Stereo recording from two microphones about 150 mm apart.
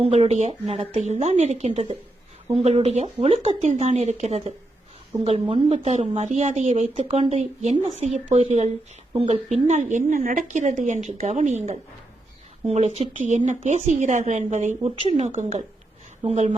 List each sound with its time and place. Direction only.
0.0 s a woman's voice: 45° right (ahead or behind)
5.7 s speech: 45° right (ahead or behind)
9.6 s speech: 55° right (ahead or behind)